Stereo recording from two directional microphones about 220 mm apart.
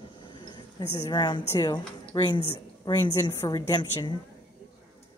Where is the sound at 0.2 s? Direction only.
20° left (ahead or behind).